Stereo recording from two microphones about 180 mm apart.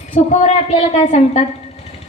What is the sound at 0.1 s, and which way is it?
Music, 40° left (ahead or behind).